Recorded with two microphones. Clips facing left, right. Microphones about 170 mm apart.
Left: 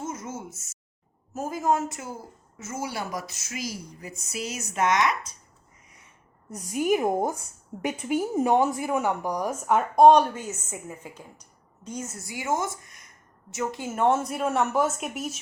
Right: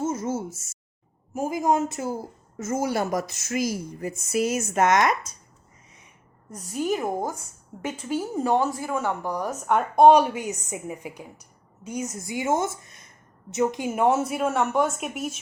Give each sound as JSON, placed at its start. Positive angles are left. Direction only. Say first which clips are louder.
{"t": 0.0, "sound": "a sound", "louder": "right 8 dB", "side_deg": -30}
{"t": 1.3, "sound": "a woman's voice", "louder": "right 2 dB", "side_deg": -15}
{"t": 2.0, "sound": "a woman's voice", "louder": "right 8 dB", "side_deg": -35}
{"t": 6.5, "sound": "a woman's voice", "louder": "left 2 dB", "side_deg": 10}